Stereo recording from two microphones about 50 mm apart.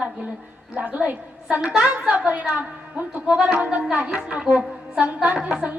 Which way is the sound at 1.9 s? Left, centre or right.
Right.